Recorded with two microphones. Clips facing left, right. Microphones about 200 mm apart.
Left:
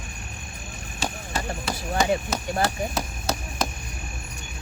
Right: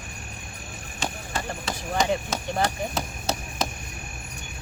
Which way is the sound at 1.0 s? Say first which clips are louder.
Left 1 dB; 5° left (ahead or behind).